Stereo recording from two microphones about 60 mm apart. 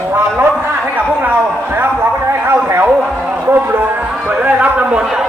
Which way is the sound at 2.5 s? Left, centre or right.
Right.